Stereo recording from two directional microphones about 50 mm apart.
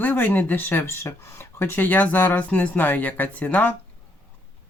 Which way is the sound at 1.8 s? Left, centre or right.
Left.